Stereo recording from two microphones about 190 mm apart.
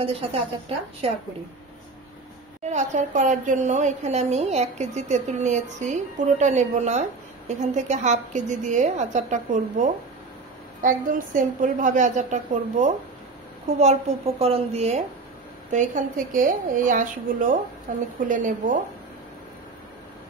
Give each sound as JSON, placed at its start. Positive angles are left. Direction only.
{"t": 0.0, "sound": "a woman's voice", "side_deg": -30}
{"t": 2.7, "sound": "a woman's voice", "side_deg": -40}
{"t": 14.4, "sound": "a woman's voice", "side_deg": -35}